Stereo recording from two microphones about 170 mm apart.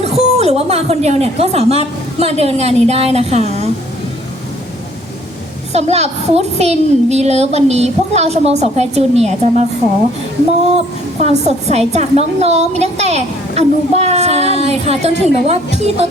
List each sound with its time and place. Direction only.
0.0 s a woman's voice: 35° right (ahead or behind)
5.7 s a woman's voice: 40° right (ahead or behind)
10.8 s a woman's voice: 40° right (ahead or behind)